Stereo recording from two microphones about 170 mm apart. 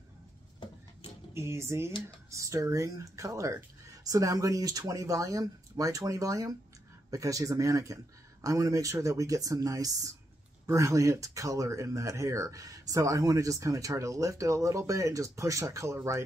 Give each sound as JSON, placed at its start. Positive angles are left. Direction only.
{"t": 1.3, "sound": "speech", "side_deg": -15}
{"t": 1.9, "sound": "speech", "side_deg": 30}
{"t": 2.3, "sound": "speech", "side_deg": -20}